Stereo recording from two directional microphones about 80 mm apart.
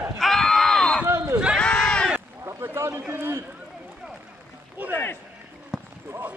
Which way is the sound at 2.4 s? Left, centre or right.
Right.